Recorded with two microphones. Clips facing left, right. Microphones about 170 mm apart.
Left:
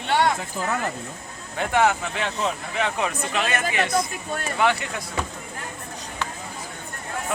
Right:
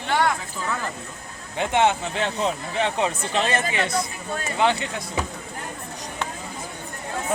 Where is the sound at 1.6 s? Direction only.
20° right (ahead or behind).